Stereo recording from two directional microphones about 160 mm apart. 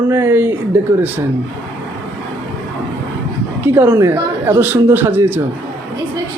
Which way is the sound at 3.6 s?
10° right (ahead or behind).